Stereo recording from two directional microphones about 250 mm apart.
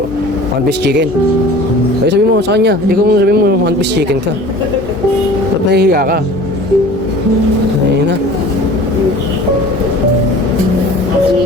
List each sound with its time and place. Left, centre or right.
2.0 s speech: right
5.7 s speech: right